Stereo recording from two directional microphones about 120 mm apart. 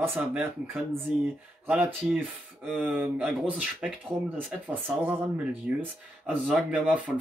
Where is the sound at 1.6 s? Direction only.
10° right (ahead or behind).